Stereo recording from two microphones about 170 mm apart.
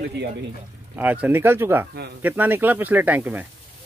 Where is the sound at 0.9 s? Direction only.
10° right (ahead or behind).